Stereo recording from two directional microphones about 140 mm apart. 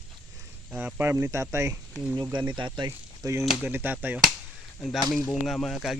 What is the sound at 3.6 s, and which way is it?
Speech, 15° right (ahead or behind).